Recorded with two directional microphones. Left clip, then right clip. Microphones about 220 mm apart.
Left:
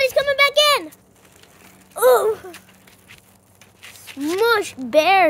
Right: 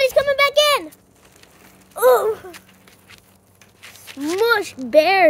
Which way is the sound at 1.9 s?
5° left (ahead or behind).